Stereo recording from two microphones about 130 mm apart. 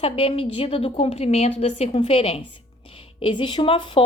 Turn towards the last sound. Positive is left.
turn(degrees=40)  # may be behind; listen again after turning